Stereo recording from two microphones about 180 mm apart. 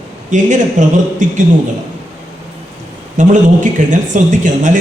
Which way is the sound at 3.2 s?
45° right (ahead or behind).